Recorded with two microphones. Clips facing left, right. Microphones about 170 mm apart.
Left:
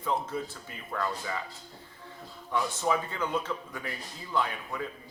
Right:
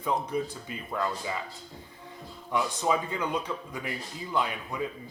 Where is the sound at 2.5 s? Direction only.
15° right (ahead or behind).